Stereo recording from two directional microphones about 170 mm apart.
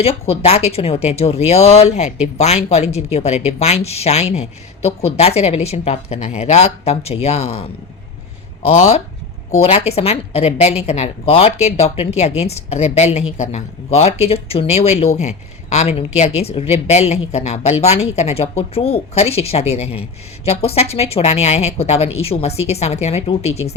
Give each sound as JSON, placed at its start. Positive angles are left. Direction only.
{"t": 0.0, "sound": "a woman's voice", "side_deg": 35}
{"t": 8.6, "sound": "a woman's voice", "side_deg": 40}